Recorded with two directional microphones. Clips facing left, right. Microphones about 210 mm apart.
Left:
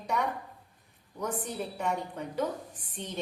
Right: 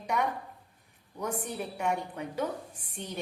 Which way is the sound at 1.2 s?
10° right (ahead or behind).